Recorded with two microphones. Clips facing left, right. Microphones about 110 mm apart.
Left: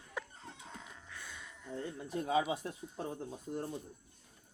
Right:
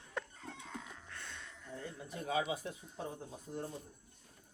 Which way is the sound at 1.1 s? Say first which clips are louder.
Even; 5° left (ahead or behind).